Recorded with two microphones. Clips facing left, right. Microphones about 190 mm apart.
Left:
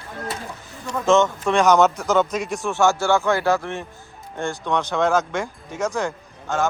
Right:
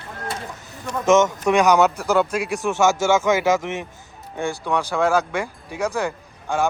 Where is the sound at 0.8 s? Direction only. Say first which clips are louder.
Right 1 dB; 20° right (ahead or behind).